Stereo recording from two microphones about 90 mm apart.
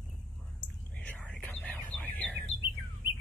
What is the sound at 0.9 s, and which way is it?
Whispering, 15° left (ahead or behind).